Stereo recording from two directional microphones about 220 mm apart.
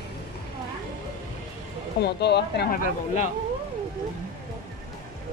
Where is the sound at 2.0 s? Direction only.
50° left (ahead or behind).